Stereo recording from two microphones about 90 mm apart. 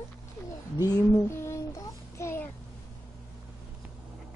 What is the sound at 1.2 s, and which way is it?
Child singing, 30° left (ahead or behind).